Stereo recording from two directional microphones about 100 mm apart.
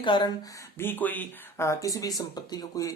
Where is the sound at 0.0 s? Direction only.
55° left (ahead or behind).